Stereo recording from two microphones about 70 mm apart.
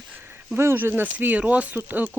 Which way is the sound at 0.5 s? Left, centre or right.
Right.